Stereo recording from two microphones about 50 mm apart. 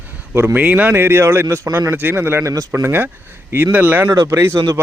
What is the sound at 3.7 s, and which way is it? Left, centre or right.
Speech, right.